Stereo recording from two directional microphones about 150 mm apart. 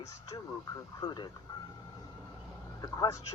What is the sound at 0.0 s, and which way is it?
Speech, 20° left (ahead or behind).